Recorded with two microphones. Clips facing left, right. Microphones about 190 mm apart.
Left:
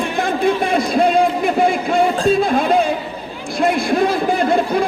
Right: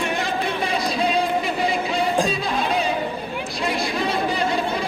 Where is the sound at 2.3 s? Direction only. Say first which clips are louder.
Left 9 dB; 55° left (ahead or behind).